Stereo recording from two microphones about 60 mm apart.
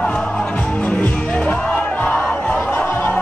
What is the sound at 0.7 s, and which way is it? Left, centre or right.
Music, left.